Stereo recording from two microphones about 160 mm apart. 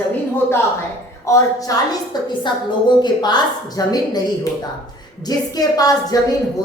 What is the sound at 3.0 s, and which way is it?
A woman's voice, 25° left (ahead or behind).